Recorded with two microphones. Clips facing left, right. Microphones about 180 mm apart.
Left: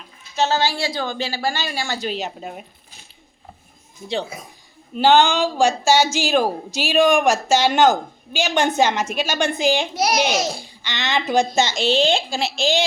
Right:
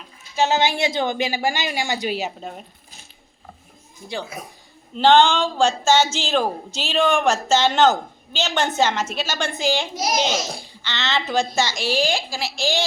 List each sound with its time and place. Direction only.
0.3 s a woman's voice: 15° right (ahead or behind)
2.4 s a woman's voice: 10° left (ahead or behind)
4.9 s a woman's voice: 10° left (ahead or behind)
9.9 s speech: 65° left (ahead or behind)
10.8 s a woman's voice: 15° left (ahead or behind)